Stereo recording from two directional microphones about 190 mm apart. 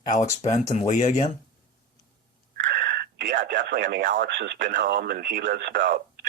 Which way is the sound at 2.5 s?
70° right (ahead or behind).